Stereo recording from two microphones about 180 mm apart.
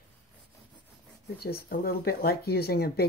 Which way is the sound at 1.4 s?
55° left (ahead or behind).